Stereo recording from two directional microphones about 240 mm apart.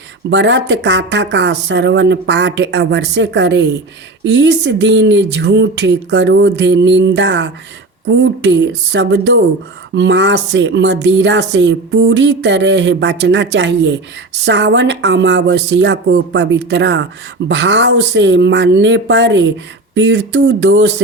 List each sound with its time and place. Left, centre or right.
0.3 s speech: right